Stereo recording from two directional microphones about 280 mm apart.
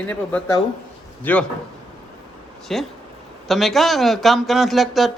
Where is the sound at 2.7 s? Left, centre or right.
Centre.